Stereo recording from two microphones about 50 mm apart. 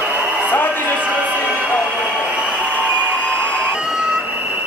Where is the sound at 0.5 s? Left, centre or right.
Left.